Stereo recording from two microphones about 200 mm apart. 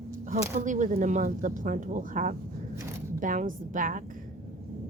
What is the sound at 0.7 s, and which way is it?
Speech, 40° right (ahead or behind).